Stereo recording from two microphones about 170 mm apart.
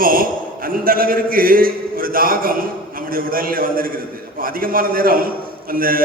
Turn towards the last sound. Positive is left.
turn(degrees=-55)  # may be behind; listen again after turning